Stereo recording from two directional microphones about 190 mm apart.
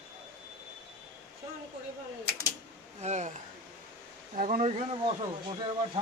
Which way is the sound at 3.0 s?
35° right (ahead or behind).